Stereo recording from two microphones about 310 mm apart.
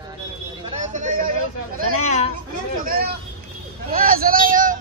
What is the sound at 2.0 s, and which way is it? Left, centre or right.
Speech, left.